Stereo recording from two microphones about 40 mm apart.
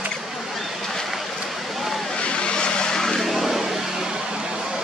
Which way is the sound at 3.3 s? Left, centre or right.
Centre.